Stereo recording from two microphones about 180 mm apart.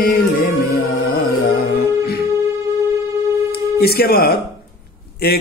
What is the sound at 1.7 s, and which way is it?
Music, 60° left (ahead or behind).